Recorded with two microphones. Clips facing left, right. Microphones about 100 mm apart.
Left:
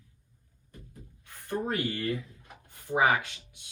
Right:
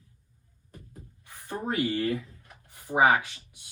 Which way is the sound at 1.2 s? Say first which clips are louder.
Left 2 dB; 15° right (ahead or behind).